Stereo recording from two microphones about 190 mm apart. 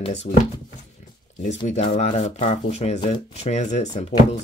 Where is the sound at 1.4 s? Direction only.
40° left (ahead or behind).